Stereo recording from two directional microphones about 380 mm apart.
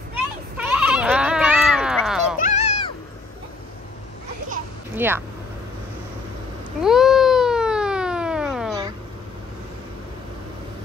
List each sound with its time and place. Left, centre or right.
0.1 s goat: centre
2.4 s cat: centre
4.9 s vehicle: centre
6.8 s a sound: centre